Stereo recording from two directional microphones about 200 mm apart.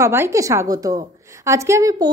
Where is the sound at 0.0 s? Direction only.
15° right (ahead or behind).